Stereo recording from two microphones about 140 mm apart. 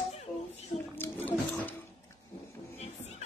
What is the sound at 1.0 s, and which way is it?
Music, 15° left (ahead or behind).